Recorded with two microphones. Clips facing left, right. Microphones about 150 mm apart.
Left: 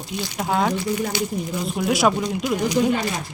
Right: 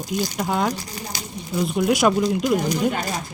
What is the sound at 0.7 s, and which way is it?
Speech, 40° right (ahead or behind).